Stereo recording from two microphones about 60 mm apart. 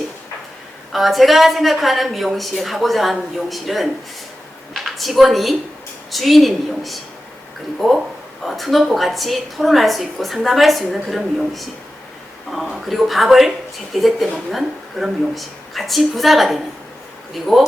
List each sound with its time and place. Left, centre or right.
0.9 s a woman's voice: centre